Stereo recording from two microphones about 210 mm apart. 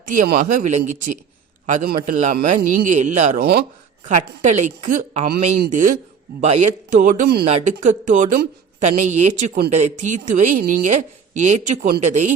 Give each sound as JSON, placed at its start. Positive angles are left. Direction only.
{"t": 0.1, "sound": "speech", "side_deg": -40}
{"t": 7.4, "sound": "speech", "side_deg": -35}